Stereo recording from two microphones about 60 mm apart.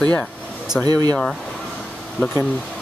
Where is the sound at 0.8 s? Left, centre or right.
Right.